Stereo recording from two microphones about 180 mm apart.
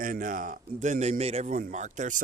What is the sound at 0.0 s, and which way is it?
A man's voice, 50° right (ahead or behind).